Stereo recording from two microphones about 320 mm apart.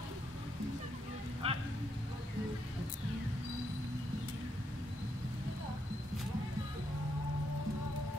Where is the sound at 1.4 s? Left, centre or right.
Centre.